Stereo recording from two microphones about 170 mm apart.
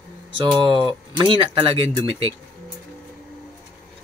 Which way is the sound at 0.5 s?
30° right (ahead or behind).